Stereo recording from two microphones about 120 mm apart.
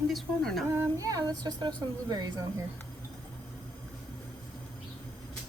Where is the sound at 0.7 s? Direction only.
25° right (ahead or behind).